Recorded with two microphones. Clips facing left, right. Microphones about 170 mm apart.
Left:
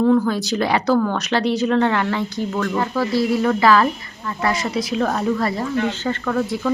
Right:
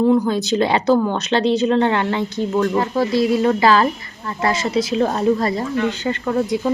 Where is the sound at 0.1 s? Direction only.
20° right (ahead or behind).